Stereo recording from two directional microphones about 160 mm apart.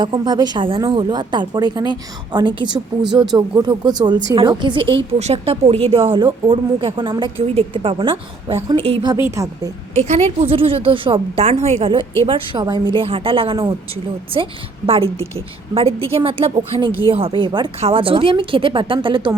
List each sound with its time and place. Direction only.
0.0 s a woman's voice: 30° right (ahead or behind)
9.1 s a woman's voice: 20° right (ahead or behind)
10.1 s speech: 40° right (ahead or behind)